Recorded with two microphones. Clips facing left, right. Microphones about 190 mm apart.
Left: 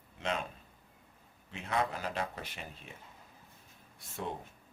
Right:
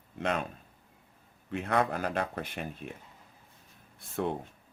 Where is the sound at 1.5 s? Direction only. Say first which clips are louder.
Right 5 dB; 55° right (ahead or behind).